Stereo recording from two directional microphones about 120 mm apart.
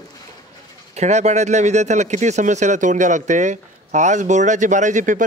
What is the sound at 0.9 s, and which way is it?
Speech, 70° right (ahead or behind).